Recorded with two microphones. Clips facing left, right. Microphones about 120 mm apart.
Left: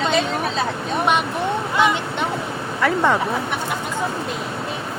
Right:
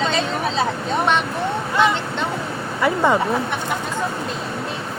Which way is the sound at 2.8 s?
10° right (ahead or behind).